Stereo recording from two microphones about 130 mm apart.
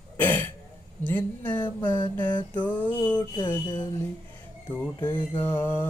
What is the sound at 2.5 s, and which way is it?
Music, 15° left (ahead or behind).